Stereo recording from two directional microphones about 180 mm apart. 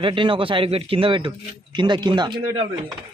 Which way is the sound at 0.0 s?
30° right (ahead or behind).